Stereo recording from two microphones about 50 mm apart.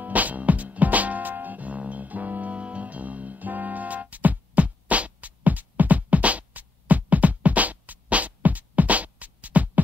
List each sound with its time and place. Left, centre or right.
0.0 s music: right